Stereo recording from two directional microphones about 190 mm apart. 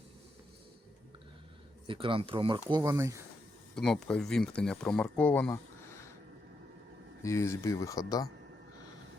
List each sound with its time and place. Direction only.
1.9 s speech: 25° right (ahead or behind)
3.8 s speech: 5° left (ahead or behind)
7.2 s speech: 15° left (ahead or behind)